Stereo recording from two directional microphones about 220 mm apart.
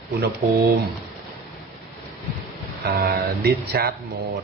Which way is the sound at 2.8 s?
45° right (ahead or behind).